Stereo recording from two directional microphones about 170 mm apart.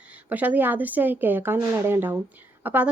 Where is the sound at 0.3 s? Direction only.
10° right (ahead or behind).